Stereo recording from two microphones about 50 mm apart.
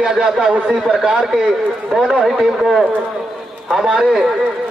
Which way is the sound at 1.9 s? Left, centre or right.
Centre.